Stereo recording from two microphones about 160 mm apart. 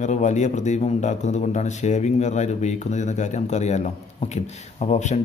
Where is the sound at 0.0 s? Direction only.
50° left (ahead or behind).